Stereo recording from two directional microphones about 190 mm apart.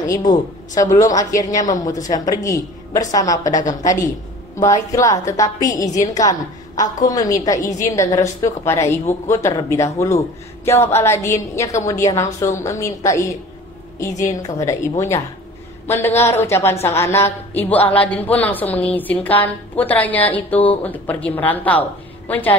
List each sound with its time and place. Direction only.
0.1 s a woman's voice: 20° left (ahead or behind)